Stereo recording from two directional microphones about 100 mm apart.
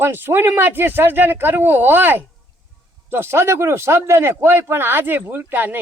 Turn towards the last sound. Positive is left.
turn(degrees=-20)  # may be behind; listen again after turning